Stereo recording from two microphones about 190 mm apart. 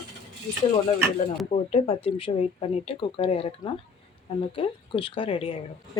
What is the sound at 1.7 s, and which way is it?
Speech, 30° left (ahead or behind).